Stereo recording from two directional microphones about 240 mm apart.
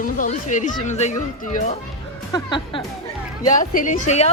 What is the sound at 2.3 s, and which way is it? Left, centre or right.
Speech, centre.